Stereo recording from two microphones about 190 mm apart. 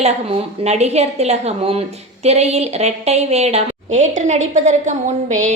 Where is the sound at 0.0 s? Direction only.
35° right (ahead or behind).